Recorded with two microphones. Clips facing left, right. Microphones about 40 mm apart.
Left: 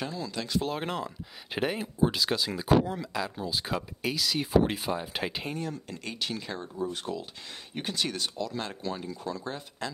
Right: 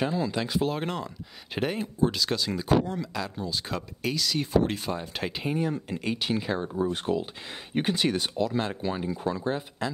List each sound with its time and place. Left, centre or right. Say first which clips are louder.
0.0 s speech: right 7 dB; right
0.6 s speech: even; centre
5.5 s speech: right 7 dB; centre
6.7 s speech: right 4 dB; right